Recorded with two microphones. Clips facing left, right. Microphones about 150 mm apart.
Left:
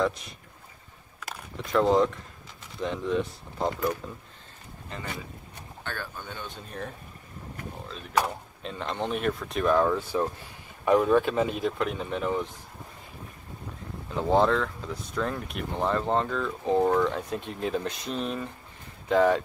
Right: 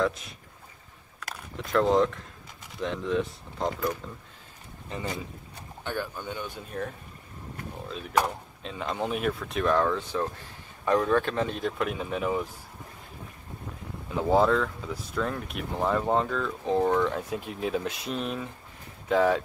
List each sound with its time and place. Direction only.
0.0 s a man's voice: centre (ahead or behind)
1.2 s keys jangling: centre (ahead or behind)
2.8 s speech: centre (ahead or behind)
5.9 s speech: 15° right (ahead or behind)
8.2 s speech: centre (ahead or behind)
14.3 s speech: 5° right (ahead or behind)